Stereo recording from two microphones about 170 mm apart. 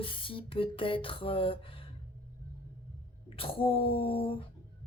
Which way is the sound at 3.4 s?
35° left (ahead or behind).